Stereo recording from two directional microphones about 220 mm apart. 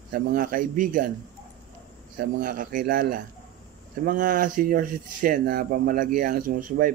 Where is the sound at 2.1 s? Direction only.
40° right (ahead or behind).